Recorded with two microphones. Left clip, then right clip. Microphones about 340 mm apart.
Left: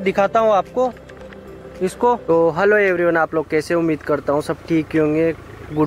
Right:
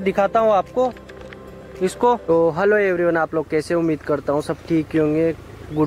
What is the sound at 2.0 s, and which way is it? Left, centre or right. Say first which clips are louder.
Speech: left 1 dB; centre.